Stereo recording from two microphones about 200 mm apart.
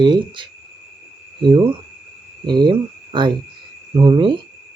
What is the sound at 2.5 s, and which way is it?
Speech, 20° right (ahead or behind).